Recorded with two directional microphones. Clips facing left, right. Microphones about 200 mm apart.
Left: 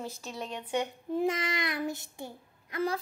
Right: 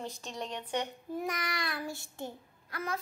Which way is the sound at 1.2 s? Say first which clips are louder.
Left 6 dB; 25° left (ahead or behind).